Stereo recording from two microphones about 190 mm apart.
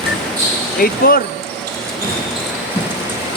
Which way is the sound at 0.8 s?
50° left (ahead or behind).